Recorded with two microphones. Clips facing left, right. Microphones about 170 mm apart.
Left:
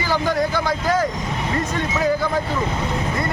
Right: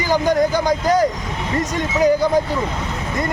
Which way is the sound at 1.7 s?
15° right (ahead or behind).